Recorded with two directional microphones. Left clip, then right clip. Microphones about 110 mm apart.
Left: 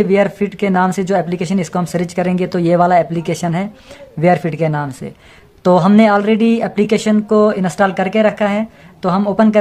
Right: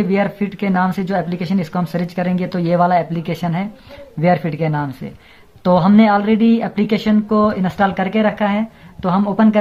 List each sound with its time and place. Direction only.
0.0 s speech: 45° left (ahead or behind)